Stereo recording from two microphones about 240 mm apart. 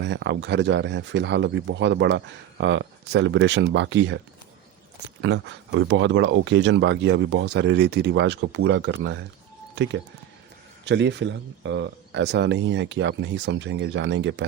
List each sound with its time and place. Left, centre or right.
0.0 s speech: right
5.2 s speech: right